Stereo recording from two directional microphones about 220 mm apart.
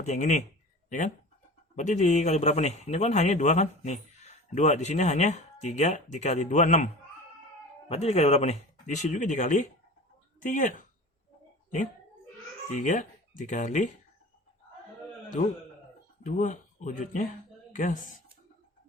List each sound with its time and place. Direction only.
0.0 s a man's voice: 35° left (ahead or behind)
12.8 s speech: 35° left (ahead or behind)
16.2 s speech: 35° left (ahead or behind)